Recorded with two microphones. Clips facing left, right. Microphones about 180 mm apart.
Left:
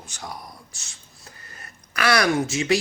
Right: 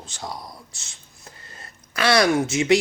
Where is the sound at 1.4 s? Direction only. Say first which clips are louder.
Right 1 dB; 25° right (ahead or behind).